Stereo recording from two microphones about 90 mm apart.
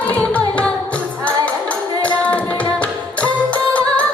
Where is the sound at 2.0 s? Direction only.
15° left (ahead or behind).